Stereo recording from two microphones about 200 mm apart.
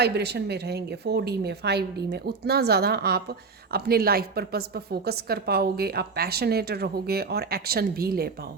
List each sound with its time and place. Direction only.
0.0 s speech: 55° right (ahead or behind)